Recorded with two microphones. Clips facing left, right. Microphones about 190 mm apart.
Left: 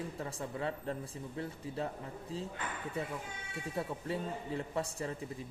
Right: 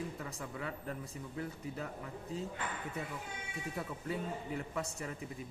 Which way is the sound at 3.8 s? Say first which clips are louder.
Left 3 dB; 30° left (ahead or behind).